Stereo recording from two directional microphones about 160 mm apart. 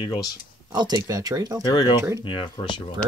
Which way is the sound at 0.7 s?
25° right (ahead or behind).